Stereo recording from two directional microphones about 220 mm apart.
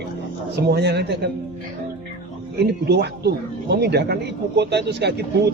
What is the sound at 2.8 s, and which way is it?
Speech, 50° right (ahead or behind).